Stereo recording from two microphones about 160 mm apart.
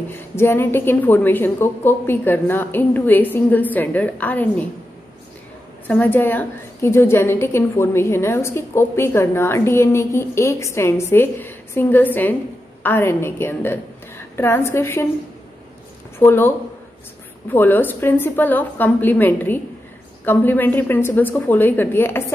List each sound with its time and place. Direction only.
0.4 s a woman's voice: 15° left (ahead or behind)
5.9 s a woman's voice: 10° left (ahead or behind)
16.2 s a woman's voice: 15° left (ahead or behind)